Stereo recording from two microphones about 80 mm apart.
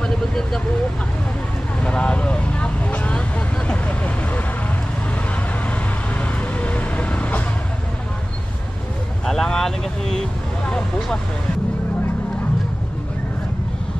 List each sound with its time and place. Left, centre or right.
0.0 s vehicle: centre
1.8 s vehicle: centre
6.1 s vehicle: centre
9.2 s vehicle: centre